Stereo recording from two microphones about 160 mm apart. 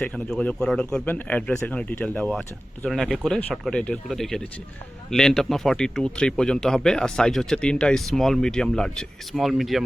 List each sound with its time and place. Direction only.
0.0 s a man's voice: 5° left (ahead or behind)